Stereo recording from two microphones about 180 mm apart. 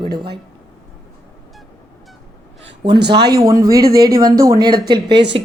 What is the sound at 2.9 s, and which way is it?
Speech, 65° right (ahead or behind).